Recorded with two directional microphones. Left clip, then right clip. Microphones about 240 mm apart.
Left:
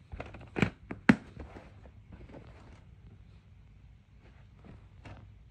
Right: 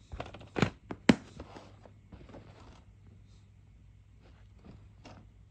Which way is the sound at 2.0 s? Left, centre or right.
Centre.